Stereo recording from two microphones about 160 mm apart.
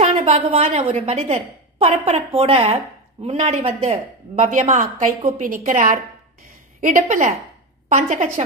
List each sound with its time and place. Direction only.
0.0 s a woman's voice: 45° right (ahead or behind)
4.4 s a woman's voice: 50° right (ahead or behind)